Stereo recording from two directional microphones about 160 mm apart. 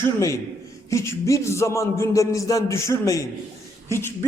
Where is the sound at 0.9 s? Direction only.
20° left (ahead or behind).